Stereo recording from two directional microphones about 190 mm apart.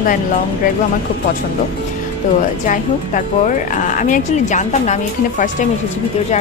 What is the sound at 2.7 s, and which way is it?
Speech, 45° left (ahead or behind).